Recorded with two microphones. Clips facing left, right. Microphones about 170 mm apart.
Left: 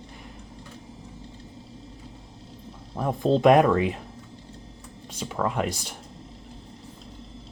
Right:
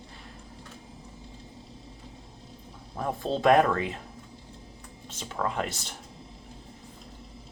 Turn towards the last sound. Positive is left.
turn(degrees=10)  # may be behind; listen again after turning